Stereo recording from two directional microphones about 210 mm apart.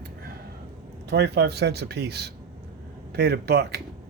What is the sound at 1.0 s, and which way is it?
Speech, 50° right (ahead or behind).